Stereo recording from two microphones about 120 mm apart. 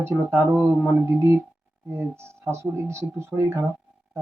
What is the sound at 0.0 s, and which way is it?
Speech, 15° right (ahead or behind).